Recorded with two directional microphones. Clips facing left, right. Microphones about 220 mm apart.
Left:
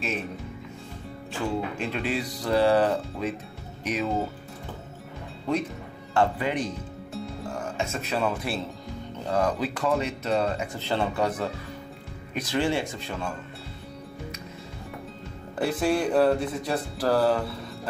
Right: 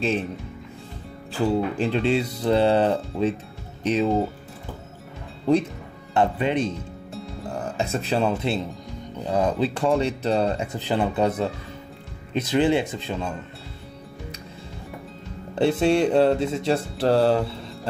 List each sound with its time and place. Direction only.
1.3 s music: 30° right (ahead or behind)
6.1 s music: 25° right (ahead or behind)
7.7 s speech: 35° right (ahead or behind)
9.2 s music: 20° right (ahead or behind)
10.8 s music: 15° right (ahead or behind)
15.5 s music: 25° right (ahead or behind)